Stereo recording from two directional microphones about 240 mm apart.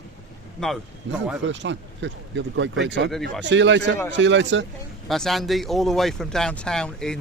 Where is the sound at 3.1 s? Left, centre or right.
Centre.